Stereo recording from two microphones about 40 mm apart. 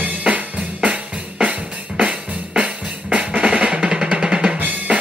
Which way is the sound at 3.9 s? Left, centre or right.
Right.